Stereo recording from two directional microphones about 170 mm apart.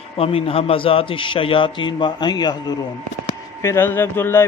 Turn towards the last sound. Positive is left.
turn(degrees=15)  # may be behind; listen again after turning